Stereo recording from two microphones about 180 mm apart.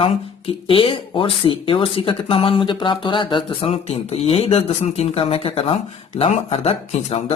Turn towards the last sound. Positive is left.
turn(degrees=35)  # may be behind; listen again after turning